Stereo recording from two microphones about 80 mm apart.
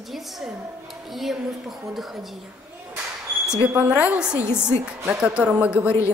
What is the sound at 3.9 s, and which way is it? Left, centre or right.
A man's voice, centre.